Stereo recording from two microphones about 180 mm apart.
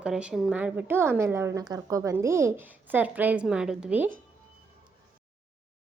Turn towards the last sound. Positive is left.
turn(degrees=-10)  # may be behind; listen again after turning